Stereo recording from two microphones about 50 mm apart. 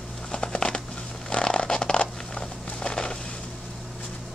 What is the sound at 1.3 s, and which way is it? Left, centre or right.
Zipper, centre.